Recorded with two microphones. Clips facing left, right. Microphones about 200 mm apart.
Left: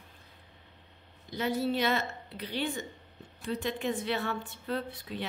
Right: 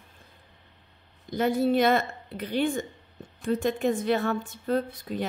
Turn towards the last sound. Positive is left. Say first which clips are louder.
# right 7 dB
turn(degrees=-45)  # may be behind; listen again after turning